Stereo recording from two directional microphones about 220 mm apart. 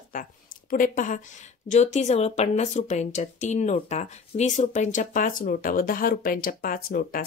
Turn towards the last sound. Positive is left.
turn(degrees=40)  # may be behind; listen again after turning